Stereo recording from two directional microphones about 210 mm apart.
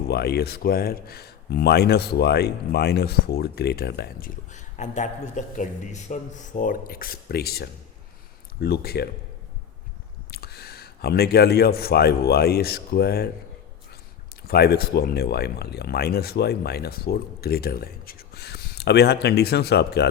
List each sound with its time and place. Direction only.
0.1 s speech: 50° left (ahead or behind)
10.3 s speech: 50° left (ahead or behind)
14.4 s speech: 50° left (ahead or behind)